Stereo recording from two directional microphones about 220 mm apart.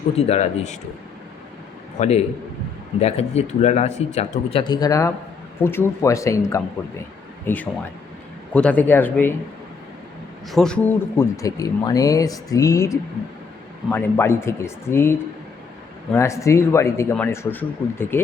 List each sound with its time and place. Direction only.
0.3 s speech: 30° left (ahead or behind)
2.0 s speech: 30° left (ahead or behind); by 9.3 s 10° left (ahead or behind)
10.5 s speech: 5° left (ahead or behind)
16.1 s speech: 15° left (ahead or behind)